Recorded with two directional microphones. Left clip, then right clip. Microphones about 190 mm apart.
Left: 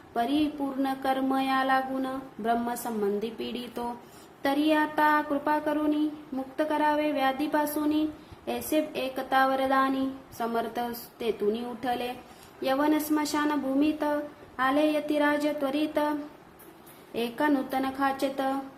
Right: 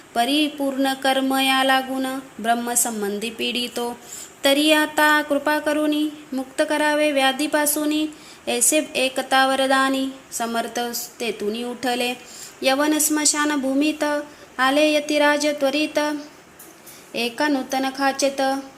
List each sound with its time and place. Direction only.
0.1 s speech: 20° right (ahead or behind)
17.2 s a woman's voice: 15° right (ahead or behind)